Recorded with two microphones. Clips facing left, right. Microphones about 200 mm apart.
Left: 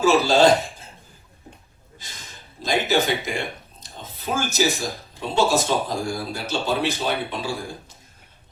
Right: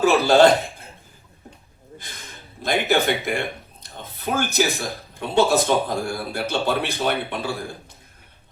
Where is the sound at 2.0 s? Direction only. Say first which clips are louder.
Right 3 dB; 60° right (ahead or behind).